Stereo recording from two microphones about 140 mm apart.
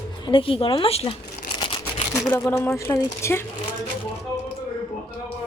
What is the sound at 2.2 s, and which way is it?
Speech, 20° left (ahead or behind).